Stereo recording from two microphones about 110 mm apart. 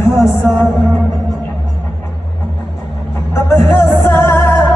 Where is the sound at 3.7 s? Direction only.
20° left (ahead or behind).